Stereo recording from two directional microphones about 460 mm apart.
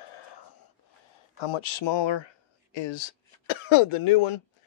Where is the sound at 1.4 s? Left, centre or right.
Left.